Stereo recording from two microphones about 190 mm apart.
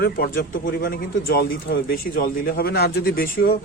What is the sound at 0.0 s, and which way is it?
A man's voice, 55° left (ahead or behind).